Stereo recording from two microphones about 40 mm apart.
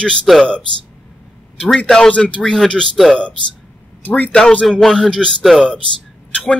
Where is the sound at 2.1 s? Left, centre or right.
Left.